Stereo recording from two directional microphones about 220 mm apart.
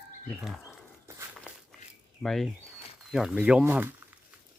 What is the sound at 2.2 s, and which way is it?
Speech, centre (ahead or behind).